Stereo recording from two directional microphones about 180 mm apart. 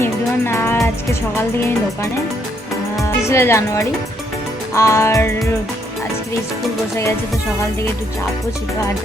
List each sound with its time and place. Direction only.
0.0 s music: 15° left (ahead or behind)
3.0 s speech: 15° left (ahead or behind)